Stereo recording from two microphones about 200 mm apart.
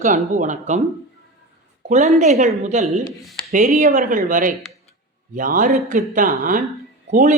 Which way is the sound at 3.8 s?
40° right (ahead or behind).